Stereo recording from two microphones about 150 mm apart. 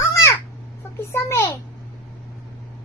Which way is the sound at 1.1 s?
15° left (ahead or behind).